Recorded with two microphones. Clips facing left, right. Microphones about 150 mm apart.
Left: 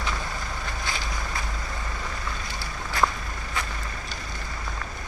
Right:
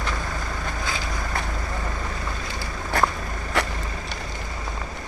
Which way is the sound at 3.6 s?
75° right (ahead or behind).